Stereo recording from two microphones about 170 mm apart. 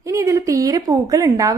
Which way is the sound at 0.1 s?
20° right (ahead or behind).